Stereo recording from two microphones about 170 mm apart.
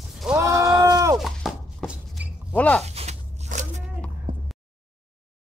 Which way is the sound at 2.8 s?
40° right (ahead or behind).